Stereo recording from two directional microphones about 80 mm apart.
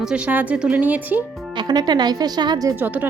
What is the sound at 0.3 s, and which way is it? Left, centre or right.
Speech, centre.